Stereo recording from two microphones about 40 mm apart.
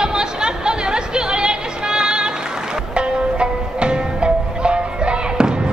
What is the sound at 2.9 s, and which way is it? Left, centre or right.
Music, right.